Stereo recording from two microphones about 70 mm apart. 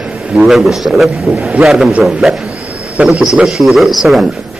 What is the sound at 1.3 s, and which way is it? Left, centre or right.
Speech, centre.